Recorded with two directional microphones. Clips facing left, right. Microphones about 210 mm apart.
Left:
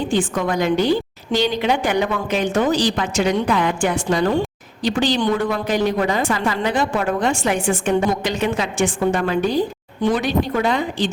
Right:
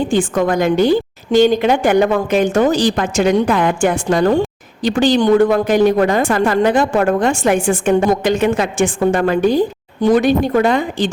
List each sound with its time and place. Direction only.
0.1 s a woman's voice: 45° right (ahead or behind)